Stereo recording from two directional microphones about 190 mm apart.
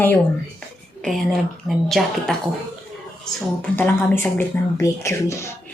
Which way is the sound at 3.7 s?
10° left (ahead or behind).